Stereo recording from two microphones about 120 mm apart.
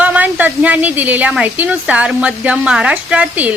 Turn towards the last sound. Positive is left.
turn(degrees=-10)  # may be behind; listen again after turning